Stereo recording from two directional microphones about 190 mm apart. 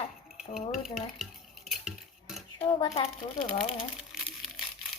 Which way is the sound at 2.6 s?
30° left (ahead or behind).